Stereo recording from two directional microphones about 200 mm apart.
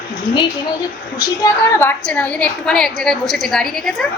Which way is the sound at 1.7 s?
10° left (ahead or behind).